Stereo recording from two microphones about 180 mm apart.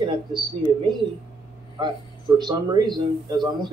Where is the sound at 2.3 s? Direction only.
25° right (ahead or behind).